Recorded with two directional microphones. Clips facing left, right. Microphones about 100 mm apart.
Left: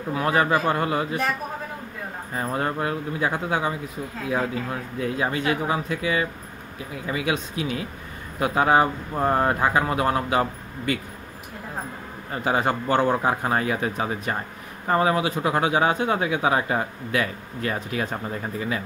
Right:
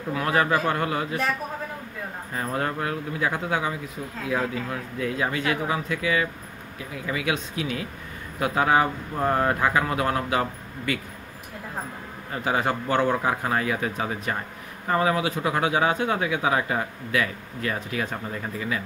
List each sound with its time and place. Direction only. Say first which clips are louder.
0.1 s speech: left 1 dB; 25° left (ahead or behind)
2.3 s speech: left 2 dB; 20° left (ahead or behind)
4.9 s speech: left 1 dB; 25° left (ahead or behind)
12.4 s speech: left 2 dB; 30° left (ahead or behind)